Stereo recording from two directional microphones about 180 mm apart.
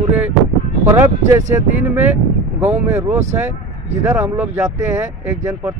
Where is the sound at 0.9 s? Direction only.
10° right (ahead or behind).